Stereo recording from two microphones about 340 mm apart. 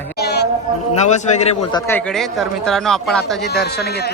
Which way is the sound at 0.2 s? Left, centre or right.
Left.